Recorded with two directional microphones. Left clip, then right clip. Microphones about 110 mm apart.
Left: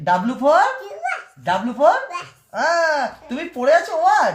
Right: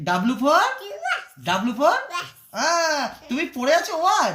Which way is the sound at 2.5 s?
35° left (ahead or behind).